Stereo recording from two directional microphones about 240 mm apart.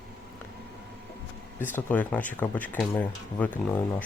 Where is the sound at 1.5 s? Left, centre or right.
Centre.